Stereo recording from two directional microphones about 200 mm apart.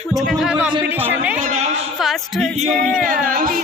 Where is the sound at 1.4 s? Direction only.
35° right (ahead or behind).